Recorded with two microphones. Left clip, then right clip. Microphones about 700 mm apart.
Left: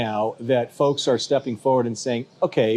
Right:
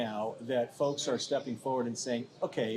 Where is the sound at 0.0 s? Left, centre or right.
Left.